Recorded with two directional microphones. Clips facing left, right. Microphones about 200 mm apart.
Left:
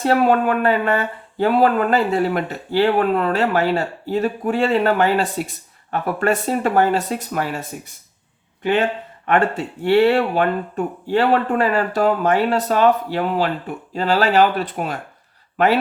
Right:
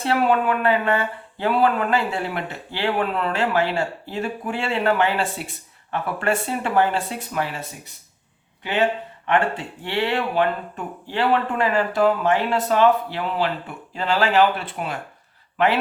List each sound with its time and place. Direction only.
0.0 s speech: 40° left (ahead or behind)
8.6 s speech: 50° left (ahead or behind)